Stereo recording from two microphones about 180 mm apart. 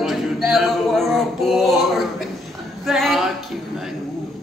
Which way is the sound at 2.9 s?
Centre (ahead or behind).